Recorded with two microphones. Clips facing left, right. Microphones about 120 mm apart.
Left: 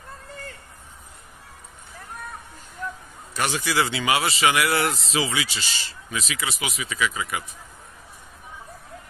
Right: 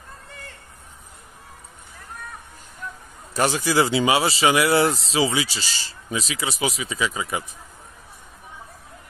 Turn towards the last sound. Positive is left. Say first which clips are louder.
# right 1 dB
turn(degrees=-25)  # may be behind; listen again after turning